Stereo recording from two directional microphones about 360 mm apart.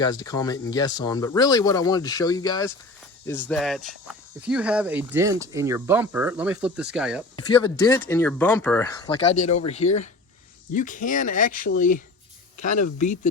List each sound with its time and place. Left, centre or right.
0.0 s speech: centre
7.3 s speech: centre